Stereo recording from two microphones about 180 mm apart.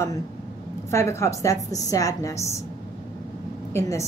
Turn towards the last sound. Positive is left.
turn(degrees=15)  # may be behind; listen again after turning